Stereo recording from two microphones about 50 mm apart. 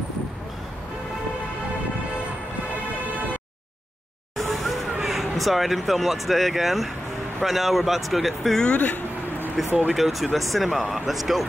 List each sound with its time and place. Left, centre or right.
4.4 s vehicle: centre
5.0 s speech: centre
8.7 s speech: left
9.6 s speech: centre